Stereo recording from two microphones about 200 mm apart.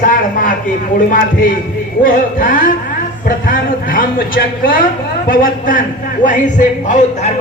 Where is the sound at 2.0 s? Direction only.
45° left (ahead or behind).